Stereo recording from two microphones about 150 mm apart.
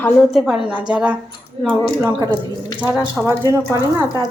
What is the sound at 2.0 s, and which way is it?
Speech, 20° right (ahead or behind).